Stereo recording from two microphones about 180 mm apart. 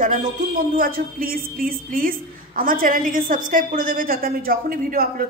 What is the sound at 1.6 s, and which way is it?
A woman's voice, 50° right (ahead or behind).